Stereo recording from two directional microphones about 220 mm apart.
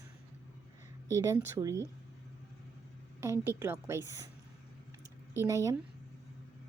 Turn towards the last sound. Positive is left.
turn(degrees=-15)  # may be behind; listen again after turning